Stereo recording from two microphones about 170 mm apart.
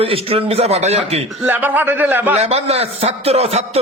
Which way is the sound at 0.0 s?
35° right (ahead or behind).